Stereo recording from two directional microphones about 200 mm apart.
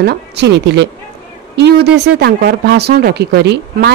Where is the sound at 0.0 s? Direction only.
55° right (ahead or behind).